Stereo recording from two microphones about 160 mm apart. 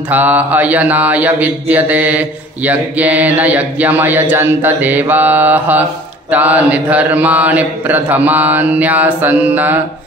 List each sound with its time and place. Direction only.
0.1 s mantra: 10° right (ahead or behind)